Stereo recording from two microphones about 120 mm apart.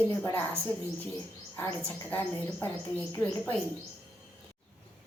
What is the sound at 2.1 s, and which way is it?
Speech, 15° left (ahead or behind).